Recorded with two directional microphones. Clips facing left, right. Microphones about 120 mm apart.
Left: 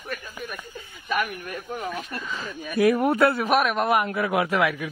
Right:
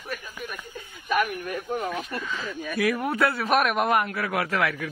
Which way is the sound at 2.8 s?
25° left (ahead or behind).